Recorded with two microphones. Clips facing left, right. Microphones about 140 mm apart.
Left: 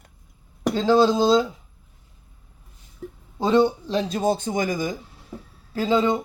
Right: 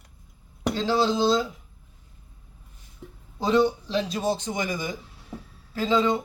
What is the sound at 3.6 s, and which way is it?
Speech, 25° left (ahead or behind).